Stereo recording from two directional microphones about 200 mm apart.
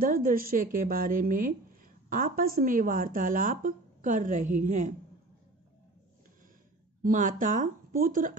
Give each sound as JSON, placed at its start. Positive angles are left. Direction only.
{"t": 0.0, "sound": "a woman's voice", "side_deg": -45}
{"t": 7.0, "sound": "speech", "side_deg": -40}